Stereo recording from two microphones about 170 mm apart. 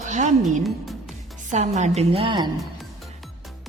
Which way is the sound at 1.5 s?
40° right (ahead or behind).